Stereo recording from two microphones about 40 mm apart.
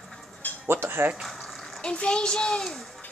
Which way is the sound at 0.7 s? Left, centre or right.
Right.